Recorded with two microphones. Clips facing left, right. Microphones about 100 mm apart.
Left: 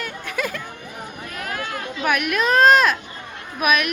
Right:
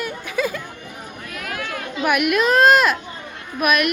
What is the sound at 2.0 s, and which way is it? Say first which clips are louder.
Speech: right 3 dB; 5° right (ahead or behind).